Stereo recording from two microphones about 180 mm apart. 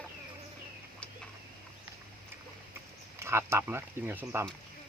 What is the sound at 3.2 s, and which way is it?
Speech, 15° right (ahead or behind).